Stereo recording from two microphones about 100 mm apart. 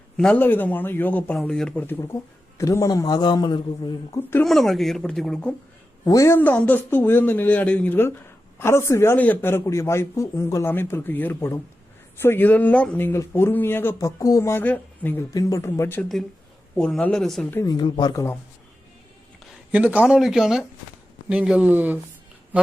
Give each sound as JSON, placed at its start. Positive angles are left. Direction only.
{"t": 0.2, "sound": "speech", "side_deg": 15}
{"t": 1.4, "sound": "speech", "side_deg": 5}
{"t": 2.6, "sound": "a man's voice", "side_deg": 35}
{"t": 4.4, "sound": "speech", "side_deg": 0}
{"t": 6.1, "sound": "a man's voice", "side_deg": 35}
{"t": 6.3, "sound": "a man's voice", "side_deg": 15}
{"t": 15.3, "sound": "a man's voice", "side_deg": 35}
{"t": 16.7, "sound": "speech", "side_deg": 10}
{"t": 17.7, "sound": "speech", "side_deg": 45}
{"t": 18.1, "sound": "a man's voice", "side_deg": 30}
{"t": 19.7, "sound": "speech", "side_deg": -15}